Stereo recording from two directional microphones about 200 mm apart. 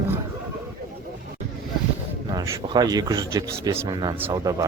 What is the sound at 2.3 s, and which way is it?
Speech, 20° right (ahead or behind).